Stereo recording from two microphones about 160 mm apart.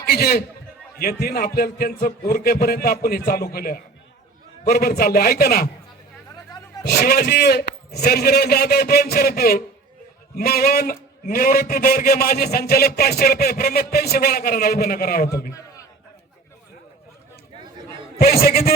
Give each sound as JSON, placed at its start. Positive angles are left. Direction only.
{"t": 0.0, "sound": "a man's voice", "side_deg": 75}
{"t": 6.8, "sound": "a man's voice", "side_deg": 75}
{"t": 18.2, "sound": "a man's voice", "side_deg": 70}